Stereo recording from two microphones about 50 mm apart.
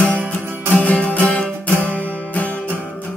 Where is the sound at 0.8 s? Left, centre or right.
Left.